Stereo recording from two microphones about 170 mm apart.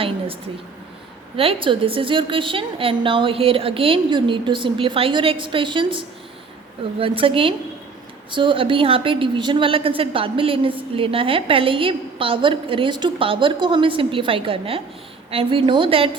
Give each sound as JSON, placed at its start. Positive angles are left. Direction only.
{"t": 1.4, "sound": "a woman's voice", "side_deg": -30}
{"t": 7.0, "sound": "a woman's voice", "side_deg": -30}